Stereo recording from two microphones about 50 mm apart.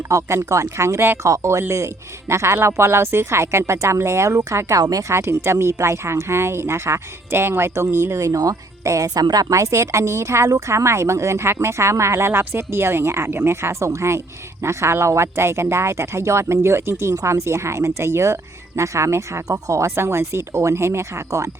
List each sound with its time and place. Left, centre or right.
0.1 s speech: right
0.4 s speech: right
2.3 s speech: right
18.8 s speech: right